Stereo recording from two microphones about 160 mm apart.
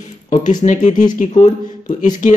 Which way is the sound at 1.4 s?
20° left (ahead or behind).